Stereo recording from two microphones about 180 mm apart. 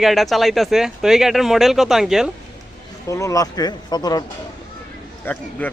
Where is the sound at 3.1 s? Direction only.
15° left (ahead or behind).